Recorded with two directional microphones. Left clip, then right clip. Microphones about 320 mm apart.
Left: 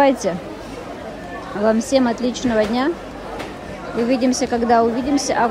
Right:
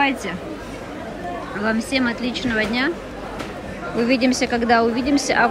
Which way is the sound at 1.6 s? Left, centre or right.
Centre.